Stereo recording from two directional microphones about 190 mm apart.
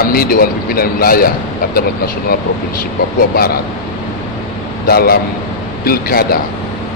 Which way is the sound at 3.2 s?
50° left (ahead or behind).